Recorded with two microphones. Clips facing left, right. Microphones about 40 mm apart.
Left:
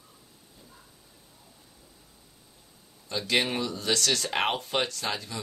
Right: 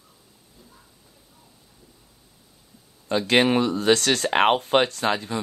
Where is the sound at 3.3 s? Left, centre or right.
Right.